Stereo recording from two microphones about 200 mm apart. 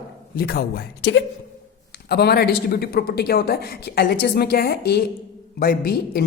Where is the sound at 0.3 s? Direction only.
50° left (ahead or behind).